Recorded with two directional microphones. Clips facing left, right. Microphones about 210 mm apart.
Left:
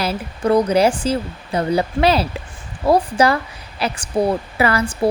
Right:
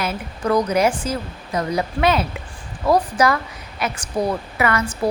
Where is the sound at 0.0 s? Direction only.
30° left (ahead or behind).